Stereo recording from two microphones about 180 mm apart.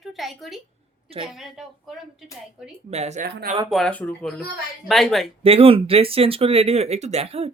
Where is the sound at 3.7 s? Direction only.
5° left (ahead or behind).